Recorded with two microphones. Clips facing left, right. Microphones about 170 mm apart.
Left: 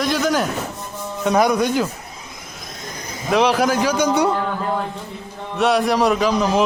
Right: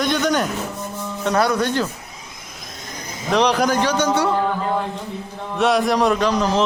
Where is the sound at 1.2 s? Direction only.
10° left (ahead or behind).